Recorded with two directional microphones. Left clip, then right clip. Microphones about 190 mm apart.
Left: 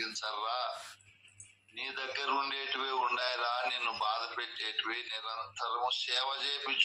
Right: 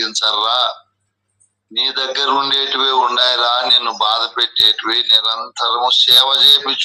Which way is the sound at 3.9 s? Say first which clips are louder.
Right 18 dB; 90° right.